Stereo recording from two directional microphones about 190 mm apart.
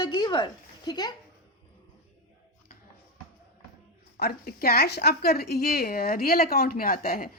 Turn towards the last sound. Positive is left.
turn(degrees=50)  # may be behind; listen again after turning